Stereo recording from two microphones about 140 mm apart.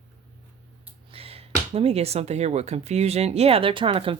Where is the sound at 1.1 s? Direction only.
45° right (ahead or behind).